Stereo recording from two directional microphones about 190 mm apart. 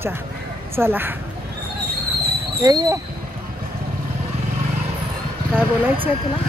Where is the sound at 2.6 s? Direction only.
20° right (ahead or behind).